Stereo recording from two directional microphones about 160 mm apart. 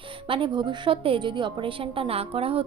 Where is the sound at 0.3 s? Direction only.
30° right (ahead or behind).